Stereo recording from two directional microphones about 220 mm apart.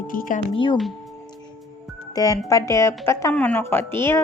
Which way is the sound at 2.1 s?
15° left (ahead or behind).